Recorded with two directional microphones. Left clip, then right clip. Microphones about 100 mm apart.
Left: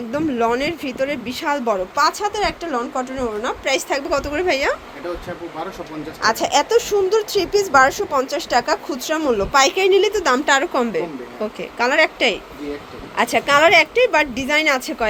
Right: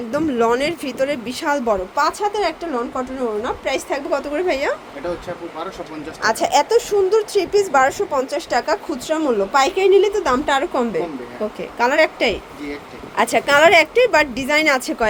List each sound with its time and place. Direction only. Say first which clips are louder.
0.1 s speech: right 2 dB; 35° right (ahead or behind); by 4.8 s centre (ahead or behind)
6.2 s speech: right 1 dB; 15° right (ahead or behind)